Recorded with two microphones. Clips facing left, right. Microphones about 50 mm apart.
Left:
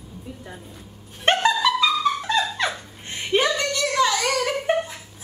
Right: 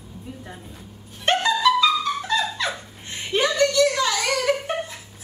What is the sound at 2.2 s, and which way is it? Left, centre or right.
Dog, left.